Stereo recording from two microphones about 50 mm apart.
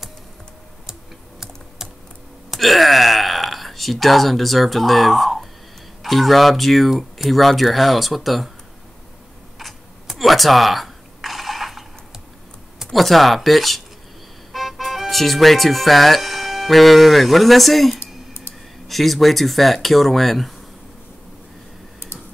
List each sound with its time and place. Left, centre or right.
1.8 s computer keyboard: centre
2.5 s speech: centre
9.6 s a sound: centre
12.9 s speech: centre
17.9 s a sound: left
18.9 s speech: centre